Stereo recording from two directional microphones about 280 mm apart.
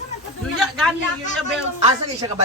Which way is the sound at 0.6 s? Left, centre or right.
Centre.